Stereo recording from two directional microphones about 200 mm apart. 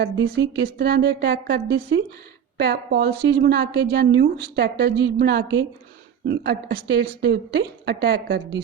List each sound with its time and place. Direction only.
0.0 s a woman's voice: 55° right (ahead or behind)